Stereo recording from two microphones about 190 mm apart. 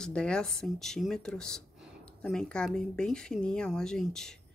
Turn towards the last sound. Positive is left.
turn(degrees=5)  # may be behind; listen again after turning